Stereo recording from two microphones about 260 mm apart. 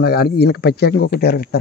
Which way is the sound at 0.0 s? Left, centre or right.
Left.